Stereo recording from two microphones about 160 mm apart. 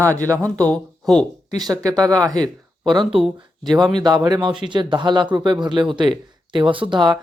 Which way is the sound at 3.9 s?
25° right (ahead or behind).